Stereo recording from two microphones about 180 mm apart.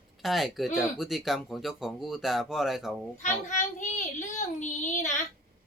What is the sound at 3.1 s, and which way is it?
A woman's voice, 40° left (ahead or behind).